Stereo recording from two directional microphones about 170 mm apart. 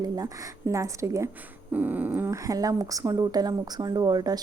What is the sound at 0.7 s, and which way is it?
A woman's voice, 15° right (ahead or behind).